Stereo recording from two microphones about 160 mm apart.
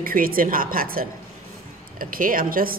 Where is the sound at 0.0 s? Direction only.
65° right (ahead or behind).